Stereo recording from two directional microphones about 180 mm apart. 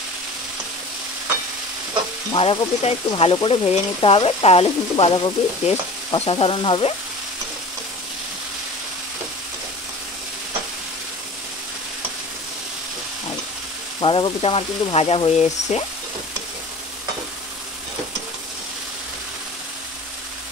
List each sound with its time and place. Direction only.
2.3 s speech: 30° left (ahead or behind)
13.9 s speech: 25° left (ahead or behind)